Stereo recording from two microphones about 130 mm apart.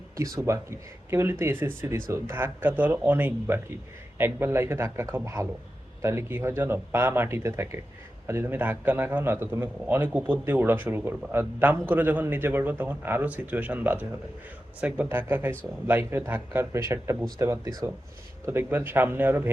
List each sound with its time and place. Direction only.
0.2 s a man's voice: 25° right (ahead or behind)